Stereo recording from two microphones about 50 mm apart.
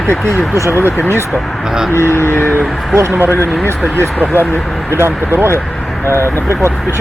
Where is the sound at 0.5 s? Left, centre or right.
Left.